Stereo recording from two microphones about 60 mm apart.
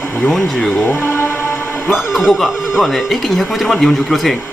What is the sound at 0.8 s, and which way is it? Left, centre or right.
Speech, left.